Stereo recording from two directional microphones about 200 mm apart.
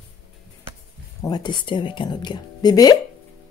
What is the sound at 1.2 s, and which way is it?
Speech, 20° left (ahead or behind).